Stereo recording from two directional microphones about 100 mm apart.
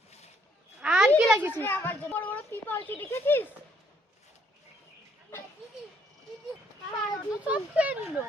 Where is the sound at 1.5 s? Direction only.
25° left (ahead or behind).